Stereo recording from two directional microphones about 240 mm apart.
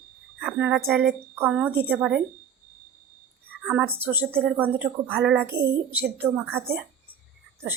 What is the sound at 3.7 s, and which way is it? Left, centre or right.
Speech, centre.